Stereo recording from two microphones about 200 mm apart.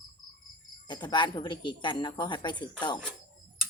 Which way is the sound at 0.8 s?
20° left (ahead or behind).